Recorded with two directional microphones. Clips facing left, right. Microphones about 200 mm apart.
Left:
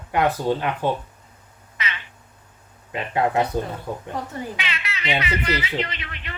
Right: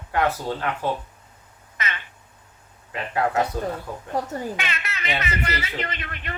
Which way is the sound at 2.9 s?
20° left (ahead or behind).